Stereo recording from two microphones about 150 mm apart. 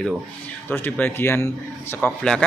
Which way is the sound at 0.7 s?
10° left (ahead or behind).